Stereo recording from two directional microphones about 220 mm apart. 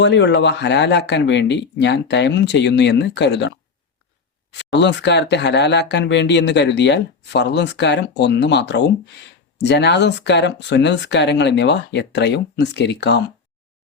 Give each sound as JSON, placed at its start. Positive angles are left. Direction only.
{"t": 0.0, "sound": "speech", "side_deg": 55}